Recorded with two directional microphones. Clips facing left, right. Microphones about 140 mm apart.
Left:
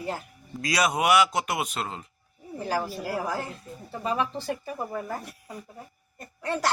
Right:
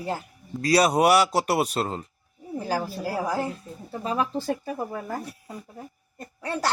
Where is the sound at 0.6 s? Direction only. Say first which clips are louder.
Right 5 dB; 35° right (ahead or behind).